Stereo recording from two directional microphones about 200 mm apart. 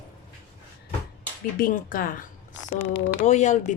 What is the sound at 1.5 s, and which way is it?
Speech, 45° left (ahead or behind).